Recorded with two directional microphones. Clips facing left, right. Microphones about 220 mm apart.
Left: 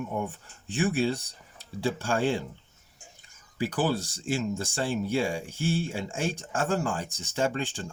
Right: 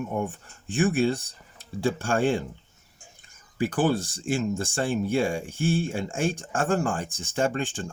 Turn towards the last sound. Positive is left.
turn(degrees=-50)  # may be behind; listen again after turning